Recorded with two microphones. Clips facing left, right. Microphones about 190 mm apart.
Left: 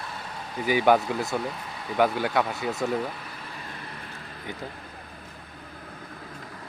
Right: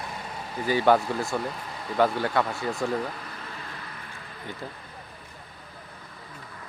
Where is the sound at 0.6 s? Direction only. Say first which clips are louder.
Even; 10° left (ahead or behind).